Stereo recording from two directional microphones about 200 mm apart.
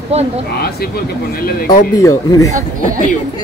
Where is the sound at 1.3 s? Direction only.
45° left (ahead or behind).